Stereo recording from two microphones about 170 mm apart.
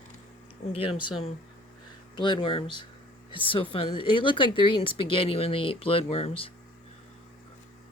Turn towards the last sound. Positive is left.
turn(degrees=35)  # may be behind; listen again after turning